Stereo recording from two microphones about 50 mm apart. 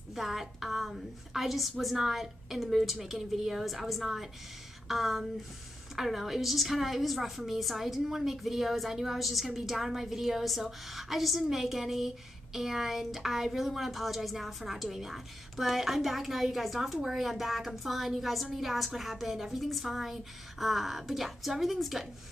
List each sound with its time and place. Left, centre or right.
0.1 s speech: centre